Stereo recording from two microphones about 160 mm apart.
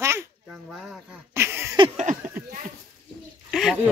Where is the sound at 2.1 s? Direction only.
55° right (ahead or behind).